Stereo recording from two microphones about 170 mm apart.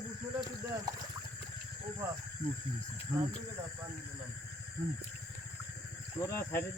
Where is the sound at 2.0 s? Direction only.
10° right (ahead or behind).